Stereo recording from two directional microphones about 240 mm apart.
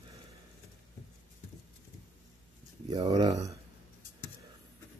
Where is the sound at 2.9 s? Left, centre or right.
Centre.